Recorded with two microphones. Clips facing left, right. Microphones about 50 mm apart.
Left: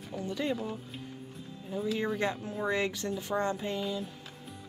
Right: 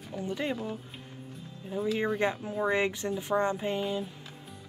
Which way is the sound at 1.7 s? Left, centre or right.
Centre.